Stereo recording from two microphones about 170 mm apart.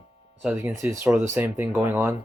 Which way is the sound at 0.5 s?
15° right (ahead or behind).